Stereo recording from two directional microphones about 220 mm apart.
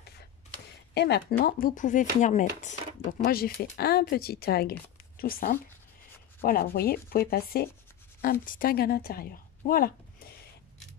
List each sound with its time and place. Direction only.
0.9 s speech: 50° left (ahead or behind)
1.4 s a woman's voice: 40° left (ahead or behind)